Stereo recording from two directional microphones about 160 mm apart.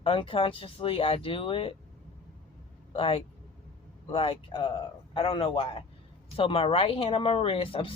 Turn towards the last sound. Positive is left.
turn(degrees=35)  # may be behind; listen again after turning